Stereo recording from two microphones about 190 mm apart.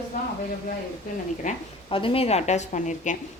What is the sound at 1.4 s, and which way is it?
A woman's voice, 35° left (ahead or behind).